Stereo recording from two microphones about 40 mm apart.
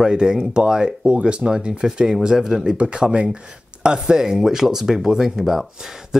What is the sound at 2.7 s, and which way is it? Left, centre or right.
Speech, right.